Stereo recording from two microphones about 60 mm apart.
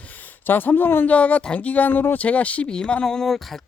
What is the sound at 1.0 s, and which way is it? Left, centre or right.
Speech, left.